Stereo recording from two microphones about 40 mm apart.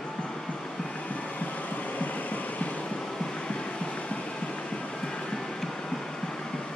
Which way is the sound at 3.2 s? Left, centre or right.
Left.